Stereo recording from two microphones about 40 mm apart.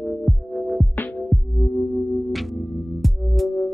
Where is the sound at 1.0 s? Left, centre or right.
Left.